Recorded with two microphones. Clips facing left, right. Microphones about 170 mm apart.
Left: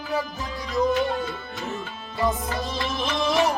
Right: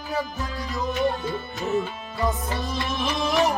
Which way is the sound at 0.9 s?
20° right (ahead or behind).